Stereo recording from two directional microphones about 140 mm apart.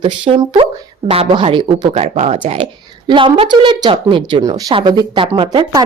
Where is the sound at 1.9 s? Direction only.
50° right (ahead or behind).